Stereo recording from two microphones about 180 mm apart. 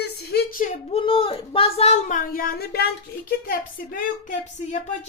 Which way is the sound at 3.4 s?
50° left (ahead or behind).